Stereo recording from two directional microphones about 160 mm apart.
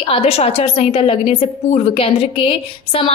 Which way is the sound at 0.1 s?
40° left (ahead or behind).